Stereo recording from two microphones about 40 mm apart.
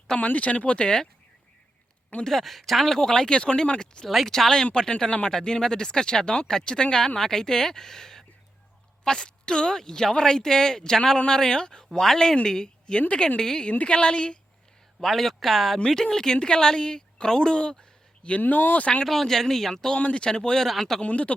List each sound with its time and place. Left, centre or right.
0.2 s speech: left
2.2 s speech: centre; by 4.0 s left
4.3 s a woman's voice: centre
13.7 s a woman's voice: left
15.0 s speech: centre
15.9 s a woman's voice: centre; by 18.4 s left
18.4 s speech: left
19.0 s speech: centre
20.0 s a woman's voice: left; by 21.0 s centre
21.0 s speech: left